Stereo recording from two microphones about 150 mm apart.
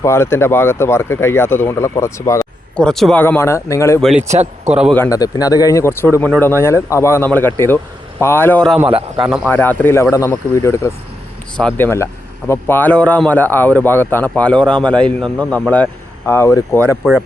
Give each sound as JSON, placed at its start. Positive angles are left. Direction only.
{"t": 0.0, "sound": "speech", "side_deg": 15}
{"t": 2.7, "sound": "speech", "side_deg": 5}
{"t": 4.2, "sound": "a man's voice", "side_deg": -50}
{"t": 4.9, "sound": "speech", "side_deg": 20}
{"t": 8.9, "sound": "speech", "side_deg": -40}
{"t": 9.2, "sound": "speech", "side_deg": -5}
{"t": 9.5, "sound": "speech", "side_deg": 15}
{"t": 17.0, "sound": "speech", "side_deg": 5}